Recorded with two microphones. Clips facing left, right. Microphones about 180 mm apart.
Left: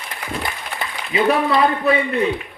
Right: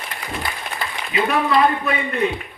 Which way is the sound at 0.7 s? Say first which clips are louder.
Even; 70° left (ahead or behind).